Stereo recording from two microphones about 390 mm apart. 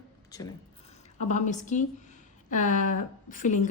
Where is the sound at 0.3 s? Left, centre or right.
Centre.